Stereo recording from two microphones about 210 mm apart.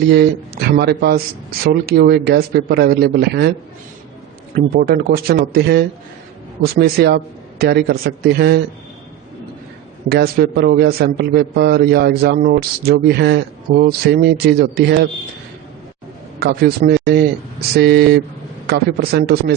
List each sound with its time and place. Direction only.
0.1 s a man's voice: 50° right (ahead or behind)
4.5 s a man's voice: 45° right (ahead or behind)
10.1 s a man's voice: 50° right (ahead or behind)
16.4 s a man's voice: 50° right (ahead or behind)